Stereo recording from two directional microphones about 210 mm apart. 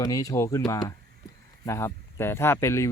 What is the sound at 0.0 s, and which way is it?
Speech, 15° left (ahead or behind).